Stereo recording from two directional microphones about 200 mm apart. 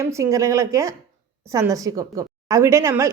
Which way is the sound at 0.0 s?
15° right (ahead or behind).